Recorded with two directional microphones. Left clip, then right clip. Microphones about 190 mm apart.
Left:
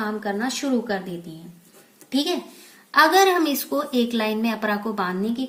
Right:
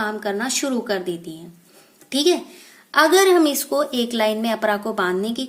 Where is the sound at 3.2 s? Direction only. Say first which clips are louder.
Right 3 dB; 25° right (ahead or behind).